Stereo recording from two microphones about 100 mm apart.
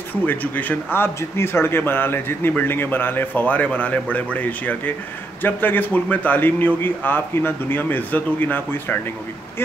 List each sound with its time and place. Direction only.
0.1 s speech: 20° left (ahead or behind)